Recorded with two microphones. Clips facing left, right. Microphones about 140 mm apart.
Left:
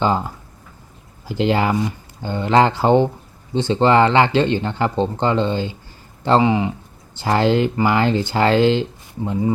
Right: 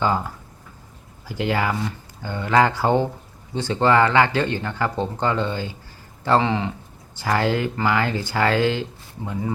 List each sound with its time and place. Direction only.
0.0 s speech: 25° left (ahead or behind)
6.4 s speech: 15° left (ahead or behind)
7.2 s speech: 25° left (ahead or behind)